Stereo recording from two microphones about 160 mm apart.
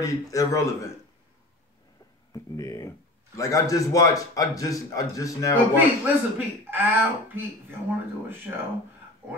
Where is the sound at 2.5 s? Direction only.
20° left (ahead or behind).